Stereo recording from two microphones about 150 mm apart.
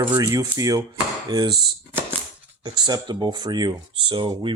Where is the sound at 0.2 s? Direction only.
25° right (ahead or behind).